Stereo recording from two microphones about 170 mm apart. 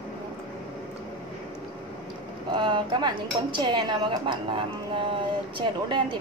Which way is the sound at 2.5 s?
30° right (ahead or behind).